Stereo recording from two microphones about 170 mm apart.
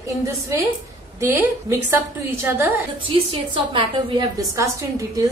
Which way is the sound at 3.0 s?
30° right (ahead or behind).